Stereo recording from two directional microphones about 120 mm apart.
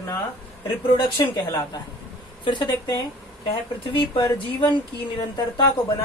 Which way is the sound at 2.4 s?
40° left (ahead or behind).